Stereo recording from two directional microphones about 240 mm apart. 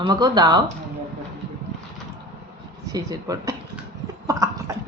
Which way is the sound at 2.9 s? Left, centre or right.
Centre.